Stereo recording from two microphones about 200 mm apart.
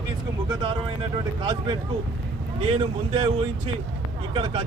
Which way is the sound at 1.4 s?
25° right (ahead or behind).